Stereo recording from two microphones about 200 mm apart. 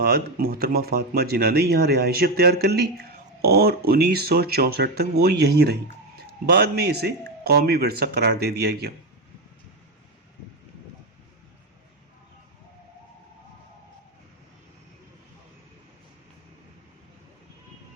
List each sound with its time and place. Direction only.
0.0 s speech: 50° right (ahead or behind)